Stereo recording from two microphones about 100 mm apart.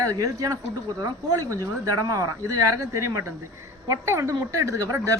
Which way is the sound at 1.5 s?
35° right (ahead or behind).